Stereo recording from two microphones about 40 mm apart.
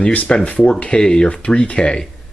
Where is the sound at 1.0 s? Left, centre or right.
Centre.